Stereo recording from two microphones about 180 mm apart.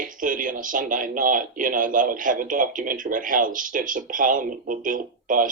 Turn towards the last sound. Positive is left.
turn(degrees=-50)  # may be behind; listen again after turning